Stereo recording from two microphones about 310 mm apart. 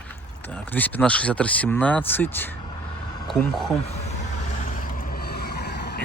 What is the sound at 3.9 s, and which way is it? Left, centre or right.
Vehicle, left.